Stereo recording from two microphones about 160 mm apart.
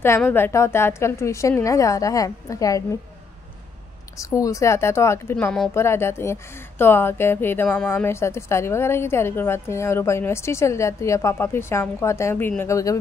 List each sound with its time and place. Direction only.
0.2 s a woman's voice: 15° left (ahead or behind)
4.2 s a woman's voice: 20° left (ahead or behind)